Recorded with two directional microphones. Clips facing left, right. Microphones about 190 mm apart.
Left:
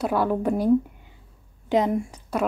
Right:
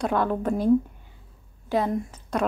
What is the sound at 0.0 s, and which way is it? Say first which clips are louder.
Speech: left 2 dB; 5° left (ahead or behind).